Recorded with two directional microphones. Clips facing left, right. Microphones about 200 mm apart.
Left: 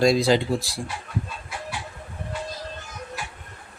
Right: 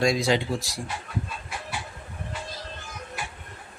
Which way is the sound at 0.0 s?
35° left (ahead or behind).